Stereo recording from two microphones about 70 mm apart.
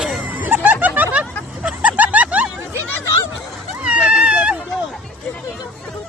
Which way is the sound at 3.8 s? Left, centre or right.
Centre.